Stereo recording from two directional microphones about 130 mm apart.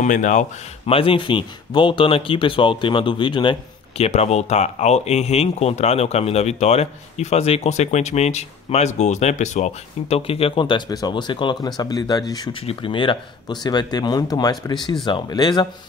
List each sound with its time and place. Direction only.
0.0 s speech: 75° left (ahead or behind)
0.8 s speech: 45° left (ahead or behind)
4.0 s speech: 55° left (ahead or behind); by 12.4 s 30° left (ahead or behind)
12.6 s speech: 40° left (ahead or behind)